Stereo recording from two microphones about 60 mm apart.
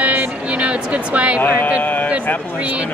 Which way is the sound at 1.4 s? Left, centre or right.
Left.